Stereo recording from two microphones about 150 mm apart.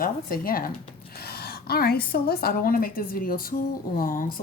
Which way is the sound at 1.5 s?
90° left.